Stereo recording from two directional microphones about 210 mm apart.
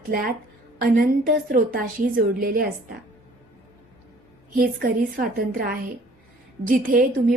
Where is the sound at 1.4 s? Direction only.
45° right (ahead or behind).